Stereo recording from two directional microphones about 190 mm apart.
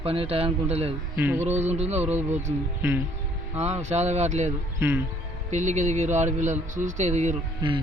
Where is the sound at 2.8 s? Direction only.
15° right (ahead or behind).